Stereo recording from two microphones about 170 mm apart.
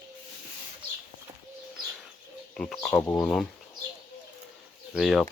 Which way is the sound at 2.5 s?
Centre (ahead or behind).